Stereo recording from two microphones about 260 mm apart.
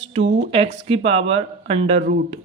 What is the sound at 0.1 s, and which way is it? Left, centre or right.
Speech, right.